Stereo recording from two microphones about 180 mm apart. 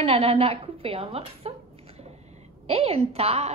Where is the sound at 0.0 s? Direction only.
35° right (ahead or behind).